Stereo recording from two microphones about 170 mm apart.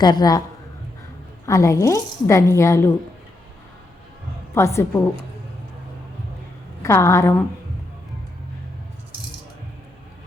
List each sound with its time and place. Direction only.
0.0 s a man's voice: 25° left (ahead or behind)
1.5 s a woman's voice: 20° left (ahead or behind)
4.5 s a woman's voice: 15° left (ahead or behind)
6.8 s a woman's voice: 15° left (ahead or behind)